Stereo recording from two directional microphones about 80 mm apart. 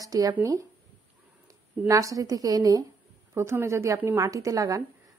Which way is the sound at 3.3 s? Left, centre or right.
Right.